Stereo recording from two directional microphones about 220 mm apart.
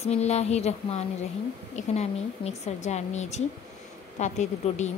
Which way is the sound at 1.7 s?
30° left (ahead or behind).